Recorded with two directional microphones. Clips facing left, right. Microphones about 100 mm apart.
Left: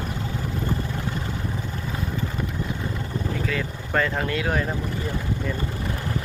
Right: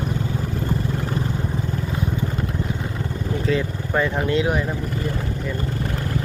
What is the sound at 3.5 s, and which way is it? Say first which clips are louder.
Vehicle: right 9 dB; 25° right (ahead or behind).